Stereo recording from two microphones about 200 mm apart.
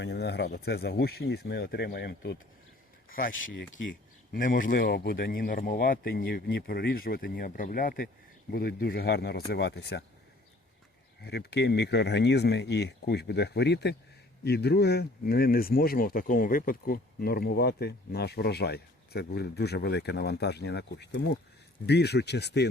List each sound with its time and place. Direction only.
0.0 s speech: 60° left (ahead or behind)
3.1 s speech: 45° left (ahead or behind)
3.8 s a sound: 65° left (ahead or behind)
4.4 s speech: 45° left (ahead or behind)
11.2 s speech: 55° left (ahead or behind)